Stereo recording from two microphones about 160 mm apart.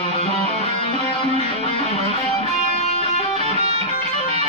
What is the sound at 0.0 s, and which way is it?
Music, 40° left (ahead or behind).